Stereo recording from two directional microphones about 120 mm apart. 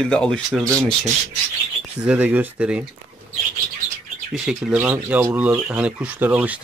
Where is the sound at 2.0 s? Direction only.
10° right (ahead or behind).